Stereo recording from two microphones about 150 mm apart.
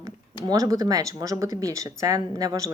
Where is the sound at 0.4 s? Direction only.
25° right (ahead or behind).